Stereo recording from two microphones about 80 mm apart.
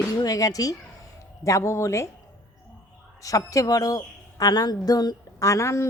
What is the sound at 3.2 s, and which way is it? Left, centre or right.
Speech, left.